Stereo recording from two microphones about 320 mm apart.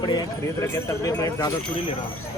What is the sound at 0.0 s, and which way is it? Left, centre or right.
Speech, centre.